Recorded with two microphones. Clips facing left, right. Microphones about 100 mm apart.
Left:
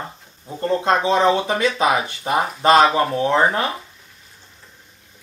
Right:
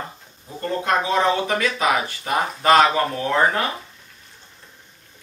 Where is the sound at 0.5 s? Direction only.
20° left (ahead or behind).